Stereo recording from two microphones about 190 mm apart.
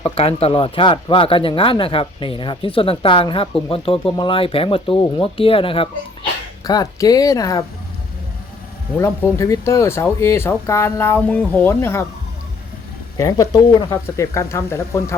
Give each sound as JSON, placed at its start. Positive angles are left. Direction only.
{"t": 0.0, "sound": "speech", "side_deg": 30}
{"t": 9.0, "sound": "speech", "side_deg": 15}
{"t": 13.1, "sound": "speech", "side_deg": 20}